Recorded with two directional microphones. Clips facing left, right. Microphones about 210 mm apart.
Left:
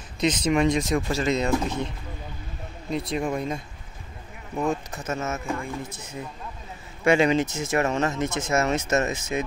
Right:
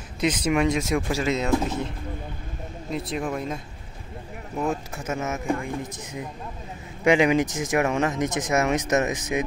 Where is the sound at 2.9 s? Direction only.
5° right (ahead or behind).